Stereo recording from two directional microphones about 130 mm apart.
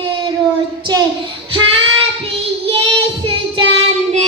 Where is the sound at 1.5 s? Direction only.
45° right (ahead or behind).